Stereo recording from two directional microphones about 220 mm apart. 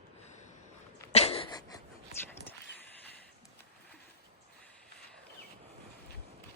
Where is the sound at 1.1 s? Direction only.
30° left (ahead or behind).